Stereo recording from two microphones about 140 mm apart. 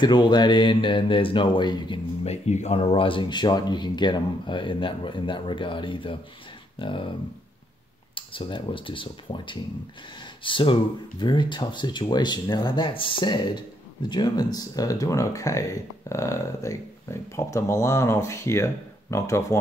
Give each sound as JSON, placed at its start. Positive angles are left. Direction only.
{"t": 0.0, "sound": "speech", "side_deg": 30}
{"t": 2.2, "sound": "speech", "side_deg": 50}
{"t": 8.1, "sound": "speech", "side_deg": 40}